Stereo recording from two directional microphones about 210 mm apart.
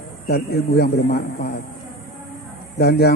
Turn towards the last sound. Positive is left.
turn(degrees=50)  # may be behind; listen again after turning